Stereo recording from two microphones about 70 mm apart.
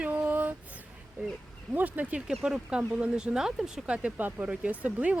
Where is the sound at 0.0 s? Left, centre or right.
Right.